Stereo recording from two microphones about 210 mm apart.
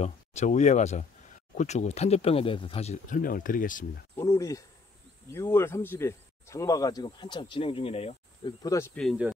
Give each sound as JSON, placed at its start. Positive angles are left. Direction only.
{"t": 0.0, "sound": "speech", "side_deg": 30}
{"t": 4.2, "sound": "speech", "side_deg": 15}
{"t": 8.6, "sound": "speech", "side_deg": 15}